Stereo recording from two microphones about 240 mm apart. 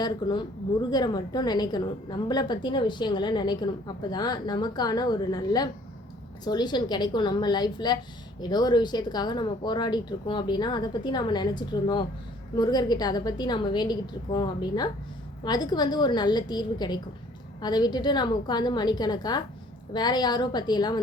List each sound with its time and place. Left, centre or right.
0.0 s a woman's voice: centre